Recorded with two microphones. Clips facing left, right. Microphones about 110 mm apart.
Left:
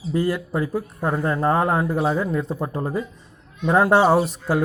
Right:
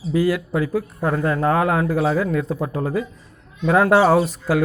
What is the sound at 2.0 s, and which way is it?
Speech, 15° left (ahead or behind).